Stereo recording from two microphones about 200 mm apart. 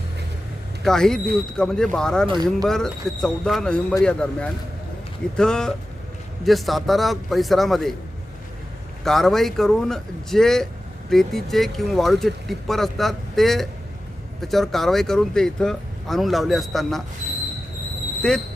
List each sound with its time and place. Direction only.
0.9 s speech: centre (ahead or behind)
2.2 s speech: 20° right (ahead or behind)
2.6 s speech: centre (ahead or behind)
9.0 s speech: centre (ahead or behind)
18.2 s speech: 5° left (ahead or behind)